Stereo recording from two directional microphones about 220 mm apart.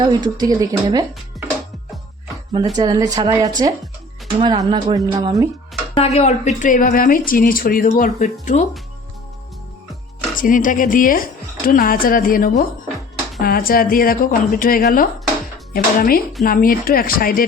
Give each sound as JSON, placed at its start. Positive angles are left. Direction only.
{"t": 0.0, "sound": "speech", "side_deg": -20}
{"t": 2.7, "sound": "speech", "side_deg": -20}
{"t": 5.9, "sound": "speech", "side_deg": 30}
{"t": 10.3, "sound": "speech", "side_deg": 35}